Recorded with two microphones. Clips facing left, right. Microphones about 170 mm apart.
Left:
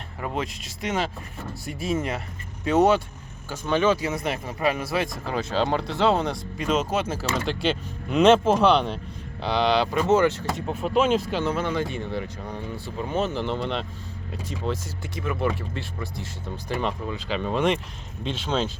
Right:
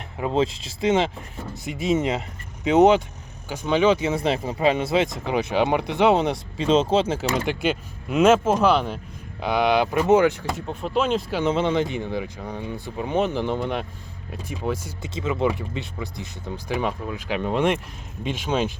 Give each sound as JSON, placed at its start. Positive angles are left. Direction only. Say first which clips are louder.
{"t": 0.2, "sound": "speech", "louder": "right 7 dB", "side_deg": -25}
{"t": 10.7, "sound": "speech", "louder": "left 2 dB", "side_deg": 5}
{"t": 11.3, "sound": "speech", "louder": "right 4 dB", "side_deg": -20}